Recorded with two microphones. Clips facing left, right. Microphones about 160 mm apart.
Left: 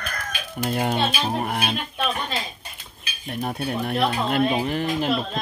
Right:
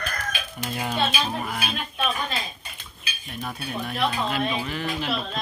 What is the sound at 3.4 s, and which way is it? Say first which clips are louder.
Speech: left 5 dB; 40° left (ahead or behind).